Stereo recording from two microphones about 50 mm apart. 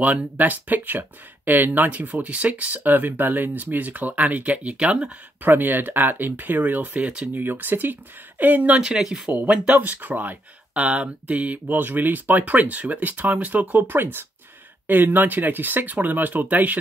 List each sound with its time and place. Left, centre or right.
0.0 s speech: right
5.4 s speech: right
7.0 s speech: right
7.3 s speech: right
8.8 s speech: centre
9.5 s speech: right
13.9 s speech: right